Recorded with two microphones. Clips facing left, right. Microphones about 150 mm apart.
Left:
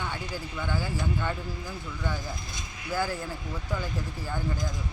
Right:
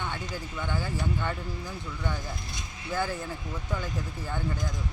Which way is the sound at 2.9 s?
10° left (ahead or behind).